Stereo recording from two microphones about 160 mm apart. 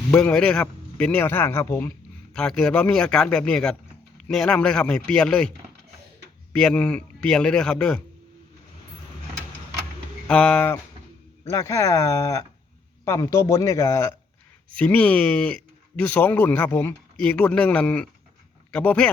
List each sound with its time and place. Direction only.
0.1 s speech: 10° left (ahead or behind)
2.3 s a man's voice: 5° left (ahead or behind)
10.2 s speech: 5° left (ahead or behind)